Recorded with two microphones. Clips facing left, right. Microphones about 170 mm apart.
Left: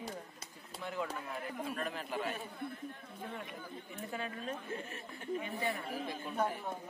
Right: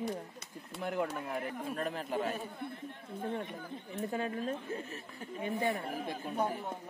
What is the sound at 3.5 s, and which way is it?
Speech, 40° right (ahead or behind).